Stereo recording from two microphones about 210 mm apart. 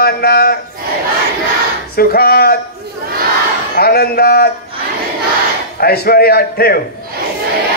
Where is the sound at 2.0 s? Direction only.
45° left (ahead or behind).